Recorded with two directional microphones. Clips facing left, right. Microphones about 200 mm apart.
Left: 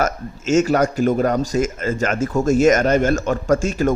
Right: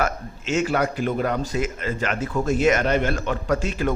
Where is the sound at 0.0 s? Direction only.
40° left (ahead or behind).